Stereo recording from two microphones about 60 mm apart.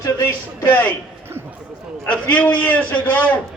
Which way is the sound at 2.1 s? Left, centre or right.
Left.